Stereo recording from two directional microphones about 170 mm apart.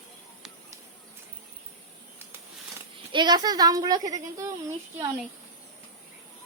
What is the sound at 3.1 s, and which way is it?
A woman's voice, 25° right (ahead or behind).